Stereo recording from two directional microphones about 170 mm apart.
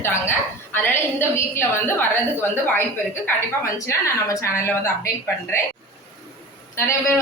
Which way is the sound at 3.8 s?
15° left (ahead or behind).